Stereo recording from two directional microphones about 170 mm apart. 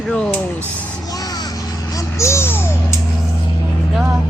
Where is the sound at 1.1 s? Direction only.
20° left (ahead or behind).